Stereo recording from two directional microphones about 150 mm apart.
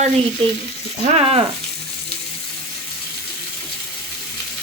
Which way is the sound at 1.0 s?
40° right (ahead or behind).